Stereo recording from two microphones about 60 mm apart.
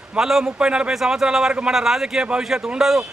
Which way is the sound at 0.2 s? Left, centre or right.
Centre.